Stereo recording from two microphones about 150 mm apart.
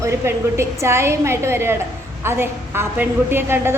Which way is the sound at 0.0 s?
20° right (ahead or behind).